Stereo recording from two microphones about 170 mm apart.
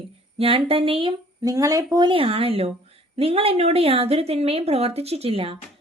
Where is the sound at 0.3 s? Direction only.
35° right (ahead or behind).